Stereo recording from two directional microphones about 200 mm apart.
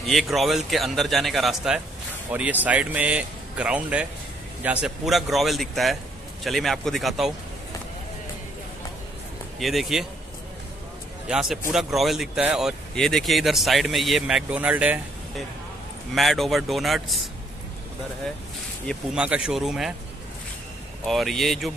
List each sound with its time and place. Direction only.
0.0 s speech: centre (ahead or behind)
9.6 s speech: centre (ahead or behind)
11.2 s speech: centre (ahead or behind)
16.2 s speech: centre (ahead or behind)
18.9 s speech: 5° right (ahead or behind)
21.0 s speech: centre (ahead or behind)